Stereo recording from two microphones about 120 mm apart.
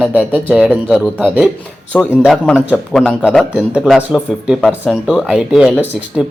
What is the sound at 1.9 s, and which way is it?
Speech, 15° left (ahead or behind).